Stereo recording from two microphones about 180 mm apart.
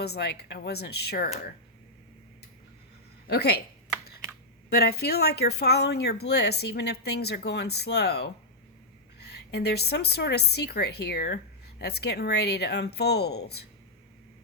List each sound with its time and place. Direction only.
0.0 s speech: 65° left (ahead or behind)
3.2 s speech: 60° left (ahead or behind)
4.7 s speech: 65° left (ahead or behind)